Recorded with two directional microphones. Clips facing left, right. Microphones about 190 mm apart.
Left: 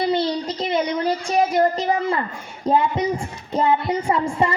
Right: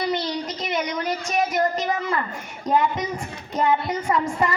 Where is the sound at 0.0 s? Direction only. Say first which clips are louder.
Left 4 dB; 30° left (ahead or behind).